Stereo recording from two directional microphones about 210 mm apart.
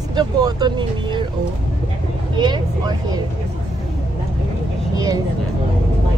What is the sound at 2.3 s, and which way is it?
Speech, 20° right (ahead or behind).